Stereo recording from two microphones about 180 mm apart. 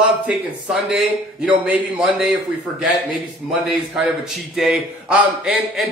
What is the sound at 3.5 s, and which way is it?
A man's voice, centre (ahead or behind).